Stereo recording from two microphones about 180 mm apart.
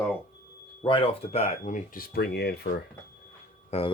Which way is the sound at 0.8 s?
30° left (ahead or behind).